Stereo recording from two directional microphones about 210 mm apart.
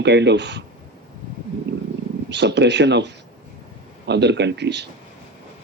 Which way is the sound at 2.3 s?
55° right (ahead or behind).